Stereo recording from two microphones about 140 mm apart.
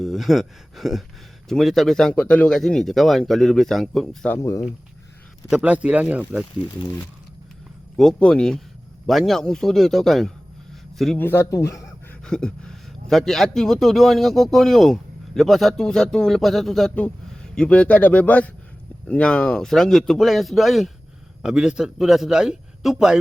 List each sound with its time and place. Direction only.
0.0 s a man's voice: centre (ahead or behind)
5.5 s speech: 10° right (ahead or behind)
7.9 s a man's voice: 5° left (ahead or behind)
11.2 s speech: 15° left (ahead or behind)
12.2 s a man's voice: 5° left (ahead or behind)